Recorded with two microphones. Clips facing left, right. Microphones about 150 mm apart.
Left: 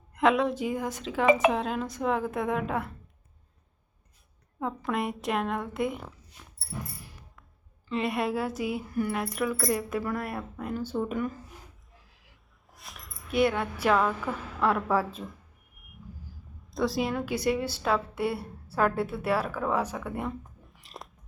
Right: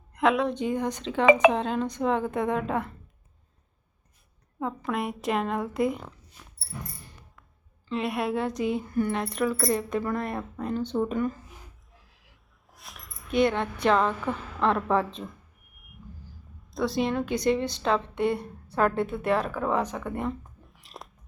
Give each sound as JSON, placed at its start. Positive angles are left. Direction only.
{"t": 0.1, "sound": "speech", "side_deg": 0}
{"t": 1.2, "sound": "speech", "side_deg": -90}
{"t": 1.5, "sound": "speech", "side_deg": 5}
{"t": 4.6, "sound": "speech", "side_deg": 0}
{"t": 7.0, "sound": "a sound", "side_deg": 5}
{"t": 7.9, "sound": "speech", "side_deg": 0}
{"t": 11.9, "sound": "a sound", "side_deg": 0}
{"t": 14.8, "sound": "speech", "side_deg": 5}